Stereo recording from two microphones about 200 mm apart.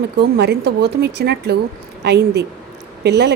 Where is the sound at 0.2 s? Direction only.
55° right (ahead or behind).